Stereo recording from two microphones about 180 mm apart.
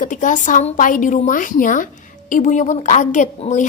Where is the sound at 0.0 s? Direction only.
45° left (ahead or behind).